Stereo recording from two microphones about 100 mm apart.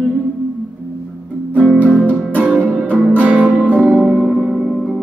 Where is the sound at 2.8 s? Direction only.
15° left (ahead or behind).